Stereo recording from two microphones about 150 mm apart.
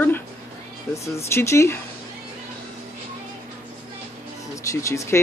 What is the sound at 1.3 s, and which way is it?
Speech, 20° left (ahead or behind).